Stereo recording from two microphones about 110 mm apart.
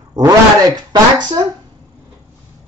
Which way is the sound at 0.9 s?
40° right (ahead or behind).